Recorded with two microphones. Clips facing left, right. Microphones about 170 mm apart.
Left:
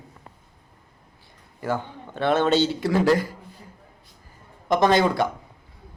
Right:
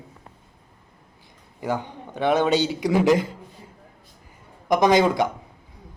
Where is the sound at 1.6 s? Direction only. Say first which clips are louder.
Even; 15° right (ahead or behind).